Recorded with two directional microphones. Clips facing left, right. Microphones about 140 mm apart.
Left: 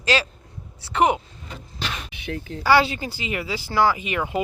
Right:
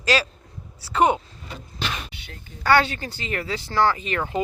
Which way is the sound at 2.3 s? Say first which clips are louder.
Left 14 dB; 85° left.